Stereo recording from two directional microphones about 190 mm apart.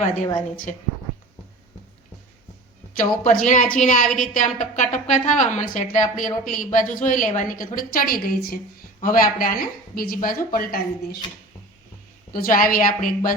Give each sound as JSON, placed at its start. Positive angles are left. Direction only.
{"t": 0.3, "sound": "a woman's voice", "side_deg": 45}
{"t": 2.9, "sound": "a woman's voice", "side_deg": 45}
{"t": 12.3, "sound": "a woman's voice", "side_deg": 50}